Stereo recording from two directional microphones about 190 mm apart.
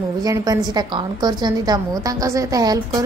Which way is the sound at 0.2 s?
20° right (ahead or behind).